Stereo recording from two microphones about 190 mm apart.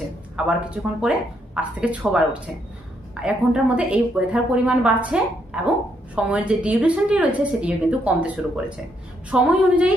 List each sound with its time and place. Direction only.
0.3 s a woman's voice: 5° right (ahead or behind)
9.3 s speech: 5° right (ahead or behind)